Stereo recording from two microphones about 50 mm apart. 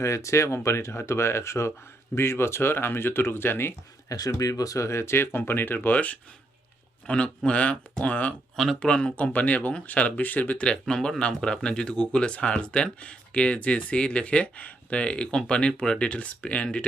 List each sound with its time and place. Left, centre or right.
0.0 s speech: left
4.8 s speech: left
7.1 s speech: left
9.1 s speech: left
10.7 s speech: centre